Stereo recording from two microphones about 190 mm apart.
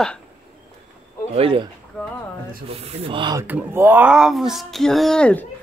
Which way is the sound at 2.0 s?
5° left (ahead or behind).